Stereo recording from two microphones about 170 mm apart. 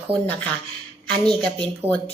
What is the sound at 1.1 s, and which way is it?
Speech, 5° left (ahead or behind).